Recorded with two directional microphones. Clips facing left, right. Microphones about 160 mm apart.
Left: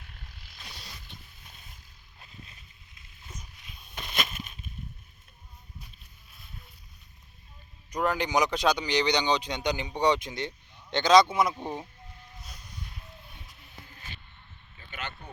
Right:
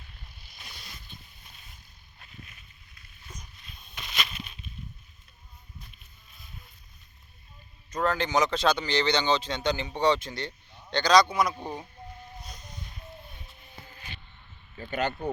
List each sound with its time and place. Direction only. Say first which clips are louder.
0.7 s vehicle: left 2 dB; 35° left (ahead or behind)
3.9 s a sound: left 2 dB; 50° left (ahead or behind)
7.9 s speech: right 1 dB; 15° left (ahead or behind)
14.8 s speech: right 11 dB; 40° right (ahead or behind)